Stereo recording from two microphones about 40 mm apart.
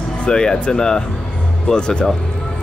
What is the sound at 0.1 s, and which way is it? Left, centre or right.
Speech, left.